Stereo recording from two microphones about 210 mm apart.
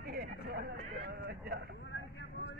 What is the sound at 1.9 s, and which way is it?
Vehicle, 55° left (ahead or behind).